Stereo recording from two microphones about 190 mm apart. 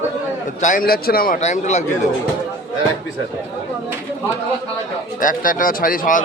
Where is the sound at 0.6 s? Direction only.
45° left (ahead or behind).